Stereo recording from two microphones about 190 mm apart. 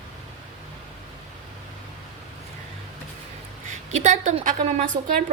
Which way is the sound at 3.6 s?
40° right (ahead or behind).